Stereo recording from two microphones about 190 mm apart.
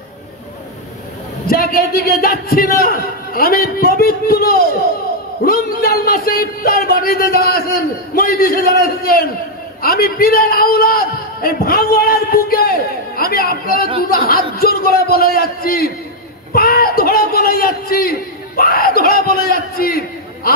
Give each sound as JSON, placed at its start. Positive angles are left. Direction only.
{"t": 1.5, "sound": "a man's voice", "side_deg": 50}
{"t": 16.5, "sound": "a sound", "side_deg": 50}
{"t": 18.6, "sound": "a man's voice", "side_deg": 50}